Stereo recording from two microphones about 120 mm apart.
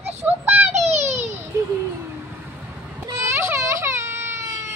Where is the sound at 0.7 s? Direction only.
70° right (ahead or behind).